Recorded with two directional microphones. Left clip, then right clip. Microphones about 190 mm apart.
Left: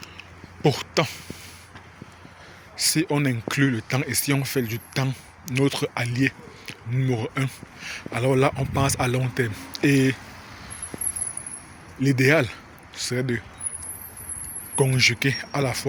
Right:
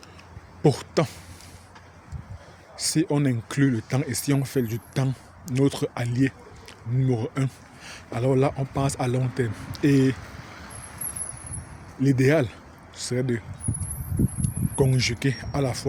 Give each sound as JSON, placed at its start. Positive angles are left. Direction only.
{"t": 0.6, "sound": "speech", "side_deg": -30}
{"t": 2.7, "sound": "speech", "side_deg": -20}
{"t": 12.0, "sound": "speech", "side_deg": -20}
{"t": 14.8, "sound": "speech", "side_deg": -20}